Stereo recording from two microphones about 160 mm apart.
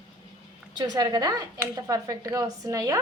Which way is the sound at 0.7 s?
25° right (ahead or behind).